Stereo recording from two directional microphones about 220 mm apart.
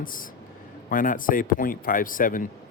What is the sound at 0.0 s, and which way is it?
Speech, 40° left (ahead or behind).